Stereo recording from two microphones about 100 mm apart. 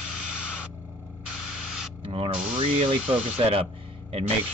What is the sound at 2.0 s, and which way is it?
Speech, 65° right (ahead or behind).